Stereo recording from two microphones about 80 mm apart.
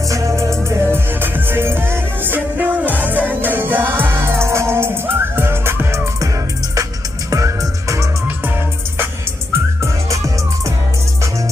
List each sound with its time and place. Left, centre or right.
0.1 s music: right
0.7 s music: right
7.3 s music: right
9.5 s music: right